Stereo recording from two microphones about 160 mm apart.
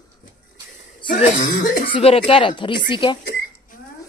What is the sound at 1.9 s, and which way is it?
Speech, 35° left (ahead or behind).